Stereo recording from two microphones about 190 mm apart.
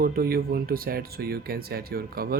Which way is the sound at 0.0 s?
55° right (ahead or behind).